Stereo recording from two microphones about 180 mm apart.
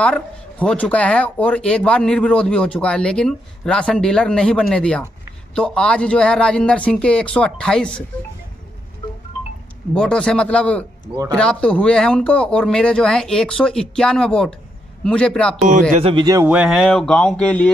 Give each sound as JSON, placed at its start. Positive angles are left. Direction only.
{"t": 0.0, "sound": "speech", "side_deg": 5}
{"t": 9.9, "sound": "speech", "side_deg": 5}
{"t": 15.9, "sound": "speech", "side_deg": -30}
{"t": 16.4, "sound": "speech", "side_deg": -5}